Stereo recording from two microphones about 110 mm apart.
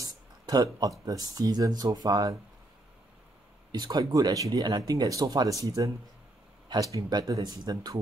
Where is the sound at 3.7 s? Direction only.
40° right (ahead or behind).